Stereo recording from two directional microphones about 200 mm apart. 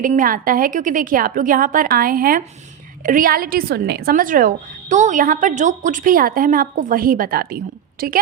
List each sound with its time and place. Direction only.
0.0 s a woman's voice: 40° right (ahead or behind)